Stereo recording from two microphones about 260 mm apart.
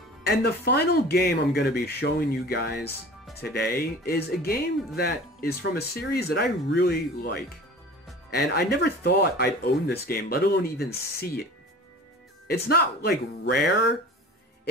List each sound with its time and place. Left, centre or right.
0.4 s speech: left
12.5 s speech: left